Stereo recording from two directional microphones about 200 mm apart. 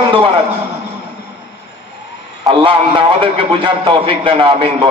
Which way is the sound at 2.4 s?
25° right (ahead or behind).